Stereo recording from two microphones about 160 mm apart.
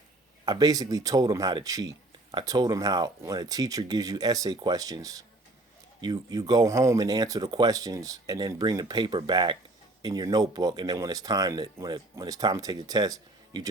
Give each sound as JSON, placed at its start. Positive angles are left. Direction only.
{"t": 0.4, "sound": "speech", "side_deg": -25}